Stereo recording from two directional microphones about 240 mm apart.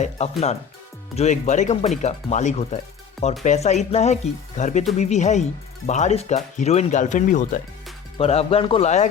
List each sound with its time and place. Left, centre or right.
0.0 s speech: left